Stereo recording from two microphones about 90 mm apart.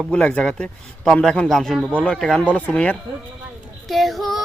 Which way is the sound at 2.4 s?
15° left (ahead or behind).